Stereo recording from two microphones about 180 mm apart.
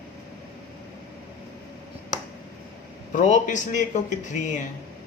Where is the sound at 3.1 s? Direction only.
45° left (ahead or behind).